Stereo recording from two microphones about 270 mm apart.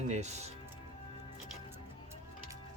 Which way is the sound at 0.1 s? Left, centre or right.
Right.